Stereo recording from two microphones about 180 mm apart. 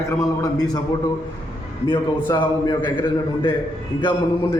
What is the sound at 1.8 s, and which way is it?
A man's voice, 25° left (ahead or behind).